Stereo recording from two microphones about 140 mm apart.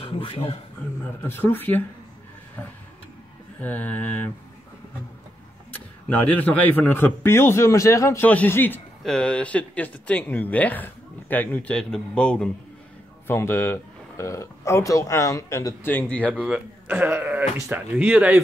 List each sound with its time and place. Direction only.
0.2 s a man's voice: 35° left (ahead or behind)
1.0 s speech: 15° left (ahead or behind)
3.6 s speech: 10° left (ahead or behind)
5.7 s speech: 10° left (ahead or behind)
13.3 s speech: 20° left (ahead or behind)
16.3 s speech: 10° right (ahead or behind)